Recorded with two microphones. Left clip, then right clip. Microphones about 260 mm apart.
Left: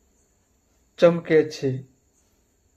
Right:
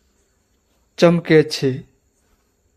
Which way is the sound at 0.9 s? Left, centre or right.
Right.